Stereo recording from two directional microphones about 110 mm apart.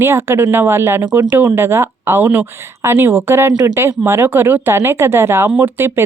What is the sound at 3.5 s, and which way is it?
Speech, 35° right (ahead or behind).